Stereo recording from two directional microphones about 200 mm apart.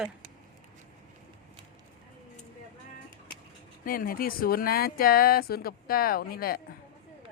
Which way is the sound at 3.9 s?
45° left (ahead or behind).